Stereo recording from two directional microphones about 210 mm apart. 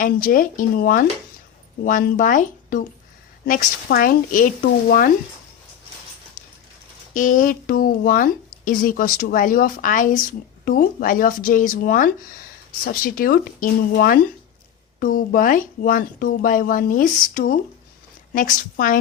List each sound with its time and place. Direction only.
0.0 s speech: 40° left (ahead or behind)
7.1 s speech: 40° left (ahead or behind)